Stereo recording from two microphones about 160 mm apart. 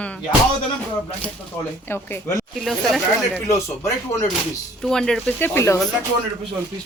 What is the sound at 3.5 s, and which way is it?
Speech, 15° left (ahead or behind).